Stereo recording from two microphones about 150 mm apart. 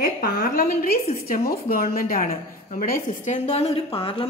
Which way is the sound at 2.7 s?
55° left (ahead or behind).